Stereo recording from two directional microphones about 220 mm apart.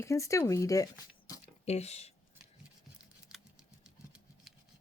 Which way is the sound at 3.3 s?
5° right (ahead or behind).